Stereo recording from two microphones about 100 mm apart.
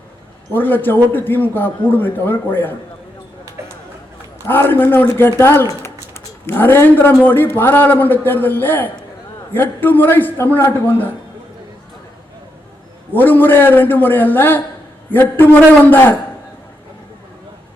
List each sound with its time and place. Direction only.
0.5 s speech: 20° left (ahead or behind)
4.4 s speech: 20° left (ahead or behind)
13.1 s speech: 20° left (ahead or behind)